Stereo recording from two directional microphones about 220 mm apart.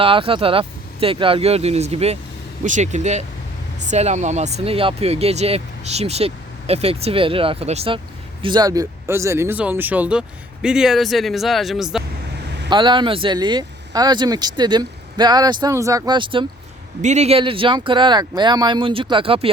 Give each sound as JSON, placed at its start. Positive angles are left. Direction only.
{"t": 0.0, "sound": "speech", "side_deg": -25}
{"t": 12.7, "sound": "speech", "side_deg": -20}